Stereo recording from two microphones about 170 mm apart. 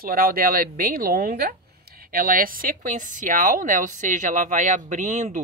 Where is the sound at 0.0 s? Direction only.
60° right (ahead or behind).